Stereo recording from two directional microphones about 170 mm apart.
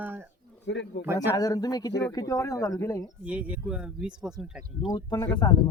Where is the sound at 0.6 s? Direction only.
90° left.